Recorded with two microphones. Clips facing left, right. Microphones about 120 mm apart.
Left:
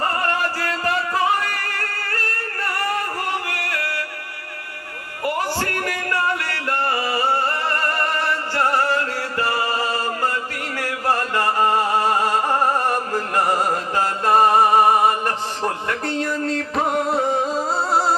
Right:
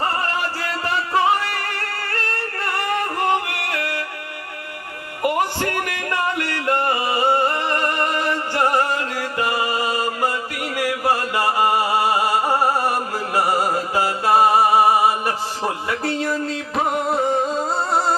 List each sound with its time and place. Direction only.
3.7 s music: 25° right (ahead or behind)
5.2 s music: 20° right (ahead or behind); by 18.1 s centre (ahead or behind)